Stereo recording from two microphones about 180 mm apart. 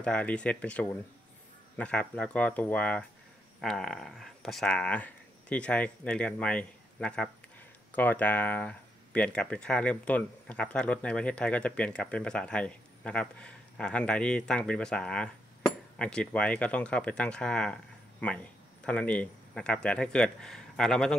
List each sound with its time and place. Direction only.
0.0 s speech: 5° left (ahead or behind)